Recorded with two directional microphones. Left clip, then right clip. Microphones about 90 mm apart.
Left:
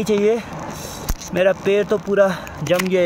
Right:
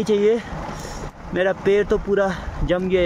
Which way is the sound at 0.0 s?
35° right (ahead or behind).